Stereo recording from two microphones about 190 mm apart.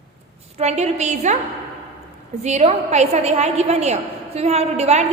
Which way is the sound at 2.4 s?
35° right (ahead or behind).